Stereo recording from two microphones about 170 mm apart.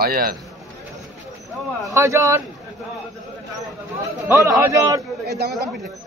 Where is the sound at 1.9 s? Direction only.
15° right (ahead or behind).